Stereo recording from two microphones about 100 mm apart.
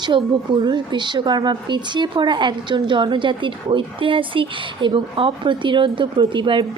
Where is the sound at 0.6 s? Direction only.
50° right (ahead or behind).